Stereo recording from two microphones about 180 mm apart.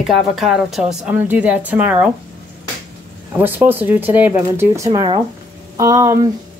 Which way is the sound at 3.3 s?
10° right (ahead or behind).